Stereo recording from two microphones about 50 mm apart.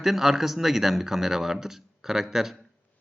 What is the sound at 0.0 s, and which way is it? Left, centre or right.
Speech, centre.